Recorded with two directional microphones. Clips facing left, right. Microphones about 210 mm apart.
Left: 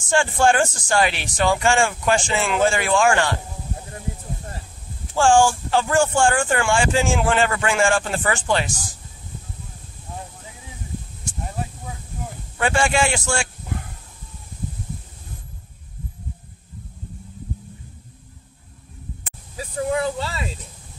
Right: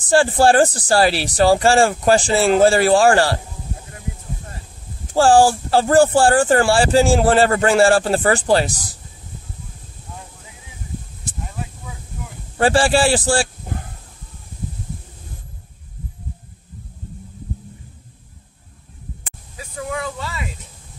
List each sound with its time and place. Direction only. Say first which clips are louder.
0.0 s speech: right 4 dB; 35° right (ahead or behind)
5.1 s speech: right 3 dB; 35° right (ahead or behind)
12.5 s speech: right 5 dB; 35° right (ahead or behind)
19.6 s a sound: left 4 dB; 30° left (ahead or behind)